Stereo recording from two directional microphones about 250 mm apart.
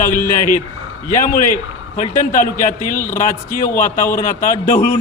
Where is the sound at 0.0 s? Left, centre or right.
Left.